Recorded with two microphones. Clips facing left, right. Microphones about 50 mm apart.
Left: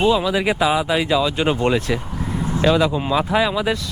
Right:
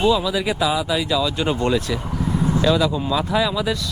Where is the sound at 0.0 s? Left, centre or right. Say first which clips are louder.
Left 2 dB; left.